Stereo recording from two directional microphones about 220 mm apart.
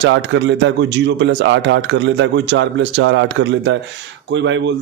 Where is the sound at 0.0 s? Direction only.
55° right (ahead or behind).